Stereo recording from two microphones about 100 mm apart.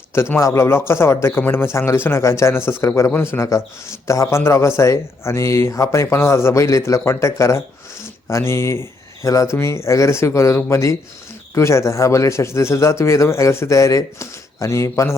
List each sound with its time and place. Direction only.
0.1 s speech: 25° left (ahead or behind)